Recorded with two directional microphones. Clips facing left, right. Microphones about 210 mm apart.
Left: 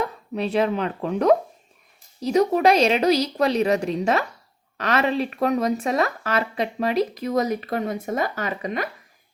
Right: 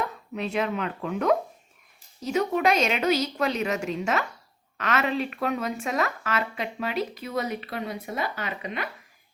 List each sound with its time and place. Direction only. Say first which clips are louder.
0.3 s speech: left 6 dB; 35° left (ahead or behind)